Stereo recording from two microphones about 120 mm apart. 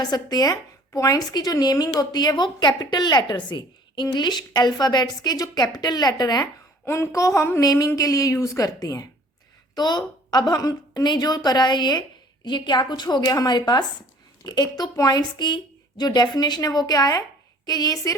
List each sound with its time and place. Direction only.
0.0 s speech: 35° left (ahead or behind)
6.8 s a woman's voice: 20° left (ahead or behind)